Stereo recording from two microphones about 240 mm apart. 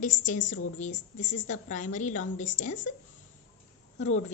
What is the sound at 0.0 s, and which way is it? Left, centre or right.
A woman's voice, left.